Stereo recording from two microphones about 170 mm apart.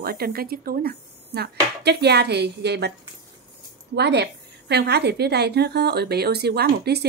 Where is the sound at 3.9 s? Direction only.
75° right (ahead or behind).